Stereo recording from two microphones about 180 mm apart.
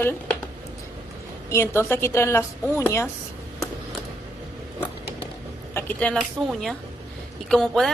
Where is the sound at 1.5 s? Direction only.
15° left (ahead or behind).